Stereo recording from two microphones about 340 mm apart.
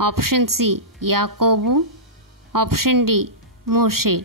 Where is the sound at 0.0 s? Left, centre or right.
Right.